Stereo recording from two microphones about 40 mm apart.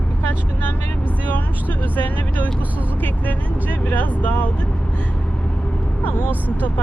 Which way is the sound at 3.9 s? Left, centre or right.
Left.